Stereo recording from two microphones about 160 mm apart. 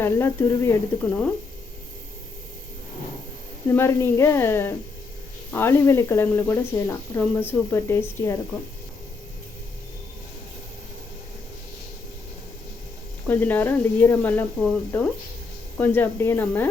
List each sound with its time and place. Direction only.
0.0 s a woman's voice: 15° left (ahead or behind)
3.7 s a woman's voice: 15° left (ahead or behind)
13.2 s a woman's voice: 10° left (ahead or behind)
15.8 s a woman's voice: 10° left (ahead or behind)